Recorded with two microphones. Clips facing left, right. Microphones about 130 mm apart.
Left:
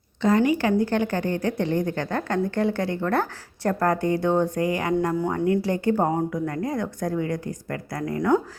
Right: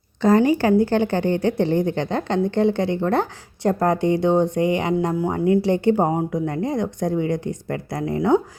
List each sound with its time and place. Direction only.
0.2 s a woman's voice: 35° right (ahead or behind)